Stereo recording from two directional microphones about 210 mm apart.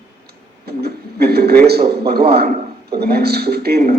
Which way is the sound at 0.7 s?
50° right (ahead or behind).